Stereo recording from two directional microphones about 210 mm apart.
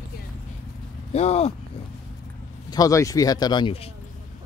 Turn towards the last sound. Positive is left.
turn(degrees=25)  # may be behind; listen again after turning